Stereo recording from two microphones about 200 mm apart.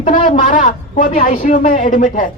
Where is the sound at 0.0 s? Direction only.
40° left (ahead or behind).